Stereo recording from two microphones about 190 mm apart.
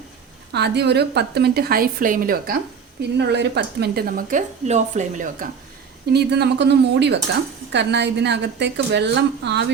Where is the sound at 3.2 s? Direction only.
65° right (ahead or behind); by 5.5 s 40° right (ahead or behind).